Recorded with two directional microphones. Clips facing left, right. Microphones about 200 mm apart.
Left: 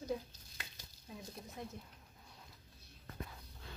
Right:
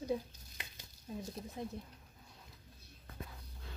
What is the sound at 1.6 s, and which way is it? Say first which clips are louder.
Speech: right 4 dB; 25° right (ahead or behind).